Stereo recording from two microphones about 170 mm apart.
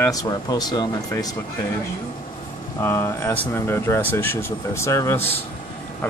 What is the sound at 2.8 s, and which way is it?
Speech, 15° left (ahead or behind).